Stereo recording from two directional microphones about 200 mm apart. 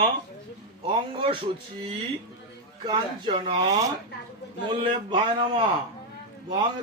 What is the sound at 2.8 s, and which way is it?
Speech, 25° right (ahead or behind).